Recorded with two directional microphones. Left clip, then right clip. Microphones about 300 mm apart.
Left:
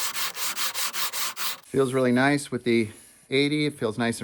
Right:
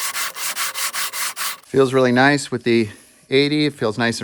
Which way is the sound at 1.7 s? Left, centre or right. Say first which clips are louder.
Right 8 dB; right.